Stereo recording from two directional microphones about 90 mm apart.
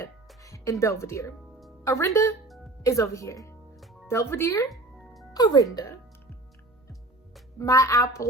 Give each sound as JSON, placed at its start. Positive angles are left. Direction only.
{"t": 0.4, "sound": "speech", "side_deg": 35}
{"t": 5.3, "sound": "speech", "side_deg": 45}
{"t": 7.6, "sound": "speech", "side_deg": 35}